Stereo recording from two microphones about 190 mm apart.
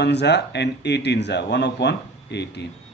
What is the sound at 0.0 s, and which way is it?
Speech, 65° left (ahead or behind).